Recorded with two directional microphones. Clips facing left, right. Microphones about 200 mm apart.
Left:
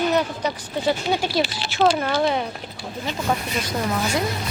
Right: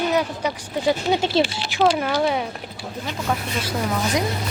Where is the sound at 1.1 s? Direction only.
20° right (ahead or behind); by 4.1 s centre (ahead or behind).